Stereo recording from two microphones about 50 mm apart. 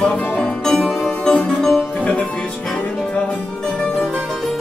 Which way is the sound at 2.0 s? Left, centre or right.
Left.